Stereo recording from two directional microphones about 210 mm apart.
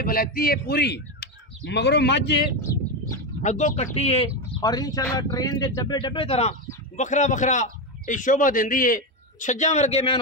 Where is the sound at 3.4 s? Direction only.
35° left (ahead or behind).